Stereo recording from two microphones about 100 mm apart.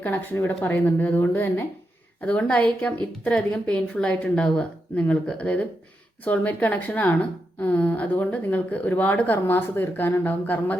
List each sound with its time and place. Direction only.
0.0 s a woman's voice: 20° left (ahead or behind)